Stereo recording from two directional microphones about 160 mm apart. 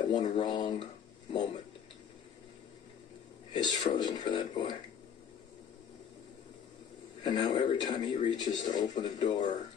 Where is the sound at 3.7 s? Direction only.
30° left (ahead or behind).